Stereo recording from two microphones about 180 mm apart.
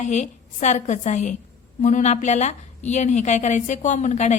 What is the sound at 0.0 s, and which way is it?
A woman's voice, 40° left (ahead or behind).